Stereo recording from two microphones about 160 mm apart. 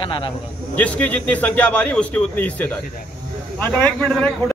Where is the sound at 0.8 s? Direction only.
10° left (ahead or behind).